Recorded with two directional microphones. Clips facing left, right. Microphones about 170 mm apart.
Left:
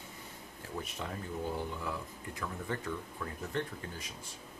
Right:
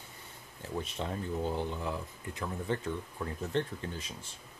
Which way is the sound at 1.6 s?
25° right (ahead or behind).